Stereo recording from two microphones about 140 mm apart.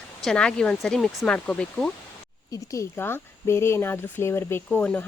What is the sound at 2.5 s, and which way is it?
Speech, 20° left (ahead or behind).